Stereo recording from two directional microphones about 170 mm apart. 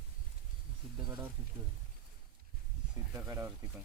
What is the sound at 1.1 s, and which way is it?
Speech, 10° right (ahead or behind).